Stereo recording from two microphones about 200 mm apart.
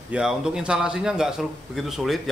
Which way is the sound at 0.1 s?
5° right (ahead or behind).